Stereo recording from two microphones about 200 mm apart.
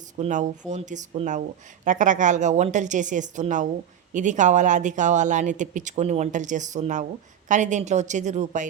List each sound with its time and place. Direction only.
0.2 s speech: 40° right (ahead or behind)